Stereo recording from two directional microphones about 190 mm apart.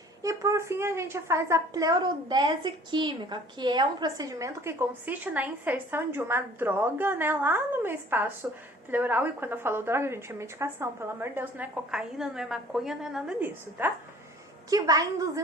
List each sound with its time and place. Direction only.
0.2 s a woman's voice: 15° right (ahead or behind)